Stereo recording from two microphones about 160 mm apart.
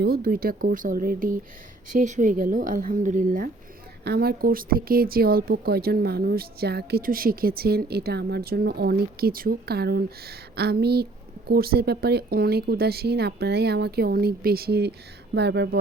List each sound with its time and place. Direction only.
0.0 s speech: 70° right (ahead or behind)
1.9 s speech: 50° right (ahead or behind)
4.0 s a woman's voice: 80° right